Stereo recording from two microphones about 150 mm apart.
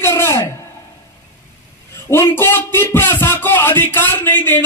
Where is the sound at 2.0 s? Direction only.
15° left (ahead or behind).